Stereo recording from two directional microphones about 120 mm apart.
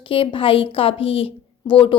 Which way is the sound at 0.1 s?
45° left (ahead or behind).